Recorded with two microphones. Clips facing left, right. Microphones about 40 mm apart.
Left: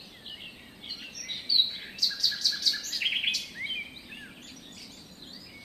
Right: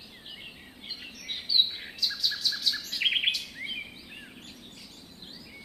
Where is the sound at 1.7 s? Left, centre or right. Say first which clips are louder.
Right 1 dB; centre.